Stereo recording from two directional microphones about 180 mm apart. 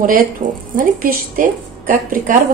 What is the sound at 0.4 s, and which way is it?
A woman's voice, 45° right (ahead or behind).